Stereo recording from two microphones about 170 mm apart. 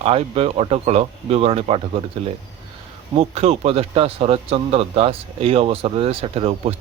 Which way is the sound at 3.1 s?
40° right (ahead or behind).